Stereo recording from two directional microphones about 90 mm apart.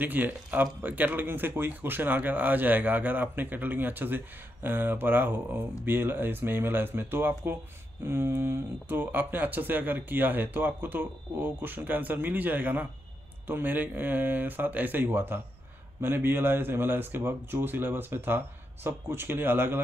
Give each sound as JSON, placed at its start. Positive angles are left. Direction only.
{"t": 0.0, "sound": "speech", "side_deg": -20}